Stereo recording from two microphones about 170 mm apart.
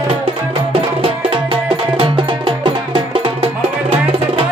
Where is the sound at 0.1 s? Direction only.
30° right (ahead or behind).